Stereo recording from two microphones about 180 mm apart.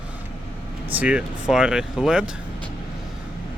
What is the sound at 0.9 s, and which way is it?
Speech, 10° right (ahead or behind).